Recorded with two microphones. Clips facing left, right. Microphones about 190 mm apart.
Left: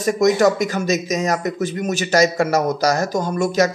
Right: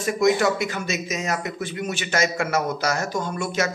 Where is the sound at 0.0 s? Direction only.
40° left (ahead or behind).